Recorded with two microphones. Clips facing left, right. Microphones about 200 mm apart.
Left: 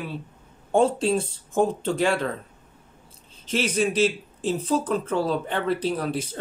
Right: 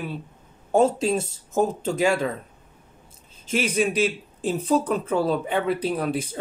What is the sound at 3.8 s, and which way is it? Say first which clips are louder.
Speech: left 2 dB; 10° right (ahead or behind).